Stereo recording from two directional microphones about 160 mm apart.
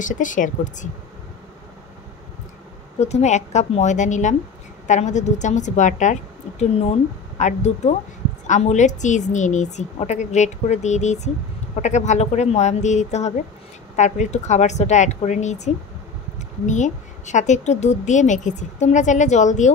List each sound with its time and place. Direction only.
0.0 s a woman's voice: 55° left (ahead or behind)
3.0 s a woman's voice: 45° left (ahead or behind)